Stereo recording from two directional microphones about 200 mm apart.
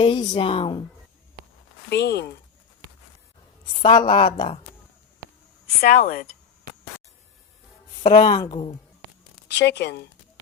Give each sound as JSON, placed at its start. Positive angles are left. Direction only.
{"t": 0.0, "sound": "a woman's voice", "side_deg": 25}
{"t": 1.9, "sound": "speech", "side_deg": 55}
{"t": 3.8, "sound": "a woman's voice", "side_deg": 25}
{"t": 5.8, "sound": "speech", "side_deg": 45}
{"t": 8.2, "sound": "a woman's voice", "side_deg": 20}
{"t": 9.6, "sound": "speech", "side_deg": 60}